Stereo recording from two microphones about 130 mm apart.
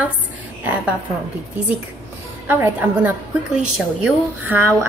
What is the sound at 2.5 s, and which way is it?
A woman's voice, 15° right (ahead or behind).